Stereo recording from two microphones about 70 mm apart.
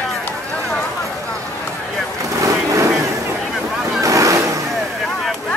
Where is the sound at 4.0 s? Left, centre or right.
Right.